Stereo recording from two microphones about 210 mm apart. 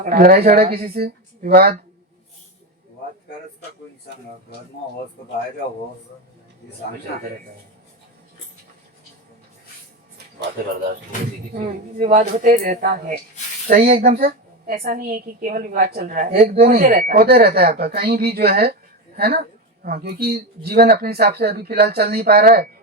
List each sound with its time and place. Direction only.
0.0 s a woman's voice: 45° right (ahead or behind)
11.5 s a woman's voice: 35° right (ahead or behind)